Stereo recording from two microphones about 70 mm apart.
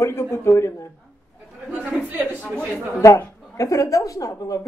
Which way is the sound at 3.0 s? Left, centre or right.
Left.